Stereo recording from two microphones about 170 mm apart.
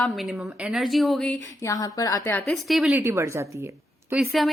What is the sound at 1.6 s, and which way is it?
Speech, 20° left (ahead or behind).